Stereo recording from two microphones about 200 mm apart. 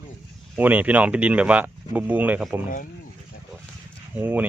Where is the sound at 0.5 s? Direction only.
10° right (ahead or behind).